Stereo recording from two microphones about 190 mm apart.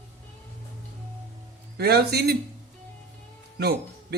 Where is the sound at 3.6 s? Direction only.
55° right (ahead or behind).